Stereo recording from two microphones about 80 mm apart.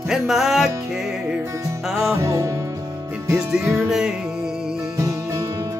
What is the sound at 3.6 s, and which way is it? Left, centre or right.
Music, right.